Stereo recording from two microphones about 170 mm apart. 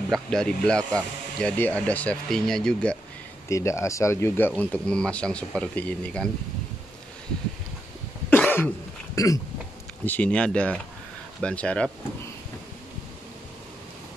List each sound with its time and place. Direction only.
0.1 s speech: 5° left (ahead or behind)
3.4 s speech: 15° left (ahead or behind)
8.3 s cough: 10° left (ahead or behind)
9.1 s hiccup: 20° left (ahead or behind)
10.0 s speech: 10° left (ahead or behind)